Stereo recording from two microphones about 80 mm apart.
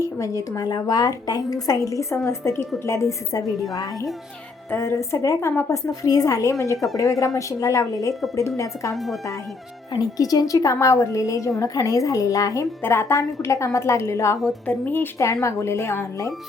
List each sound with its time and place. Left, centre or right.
0.0 s a woman's voice: left
4.7 s a woman's voice: left
12.8 s a woman's voice: left
14.4 s speech: centre
15.2 s a woman's voice: left